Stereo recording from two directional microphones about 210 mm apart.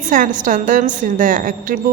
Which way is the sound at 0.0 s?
35° right (ahead or behind).